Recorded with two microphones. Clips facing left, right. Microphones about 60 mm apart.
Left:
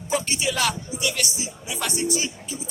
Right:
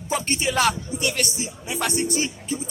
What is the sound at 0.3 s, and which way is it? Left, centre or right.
Speech, right.